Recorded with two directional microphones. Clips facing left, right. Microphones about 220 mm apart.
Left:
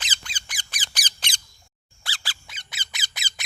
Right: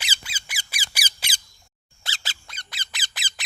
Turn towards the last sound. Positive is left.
turn(degrees=0)  # may be behind; listen again after turning